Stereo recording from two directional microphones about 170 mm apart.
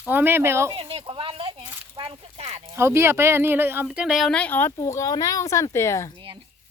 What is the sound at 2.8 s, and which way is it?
Speech, 15° right (ahead or behind).